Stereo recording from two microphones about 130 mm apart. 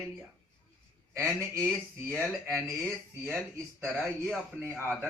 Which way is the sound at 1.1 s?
15° right (ahead or behind).